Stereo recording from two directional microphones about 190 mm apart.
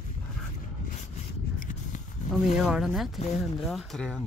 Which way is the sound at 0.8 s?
40° left (ahead or behind).